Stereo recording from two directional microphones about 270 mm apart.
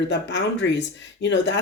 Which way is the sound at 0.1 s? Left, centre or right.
Left.